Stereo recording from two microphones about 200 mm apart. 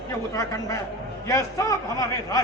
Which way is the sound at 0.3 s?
15° left (ahead or behind).